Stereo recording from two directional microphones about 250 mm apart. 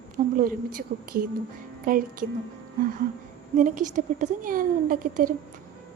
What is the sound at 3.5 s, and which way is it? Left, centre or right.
A woman's voice, right.